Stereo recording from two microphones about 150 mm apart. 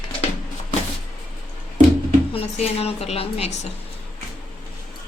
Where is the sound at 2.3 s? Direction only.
40° left (ahead or behind).